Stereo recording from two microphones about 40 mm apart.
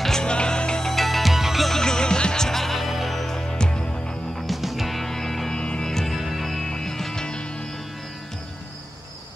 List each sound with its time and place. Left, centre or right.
0.2 s music: left
0.8 s music: centre
1.7 s music: centre
4.4 s music: centre
5.5 s music: left
5.9 s music: centre
6.1 s music: centre
6.6 s music: centre